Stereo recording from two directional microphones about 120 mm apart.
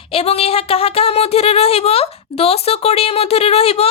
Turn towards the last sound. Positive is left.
turn(degrees=55)  # may be behind; listen again after turning